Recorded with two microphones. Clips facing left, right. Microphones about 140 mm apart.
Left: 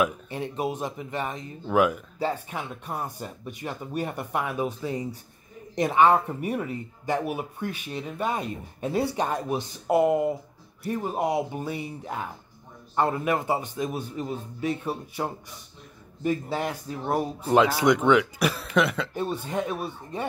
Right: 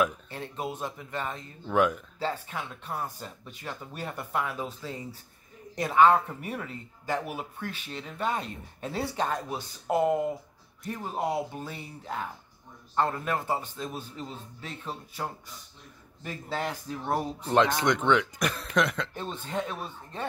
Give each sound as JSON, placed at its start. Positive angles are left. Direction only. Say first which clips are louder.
{"t": 0.0, "sound": "speech", "louder": "left 2 dB", "side_deg": 15}